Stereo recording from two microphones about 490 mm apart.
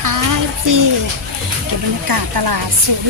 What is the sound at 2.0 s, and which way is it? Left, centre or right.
Speech, right.